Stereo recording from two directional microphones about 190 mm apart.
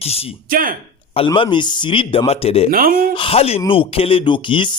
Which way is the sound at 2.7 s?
50° right (ahead or behind).